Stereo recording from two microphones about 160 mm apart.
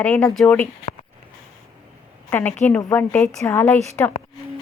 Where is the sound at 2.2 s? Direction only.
10° left (ahead or behind).